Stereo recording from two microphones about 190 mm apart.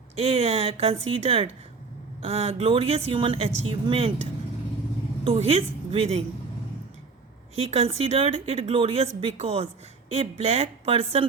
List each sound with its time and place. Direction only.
0.2 s a woman's voice: 30° right (ahead or behind)
7.5 s a woman's voice: 30° right (ahead or behind)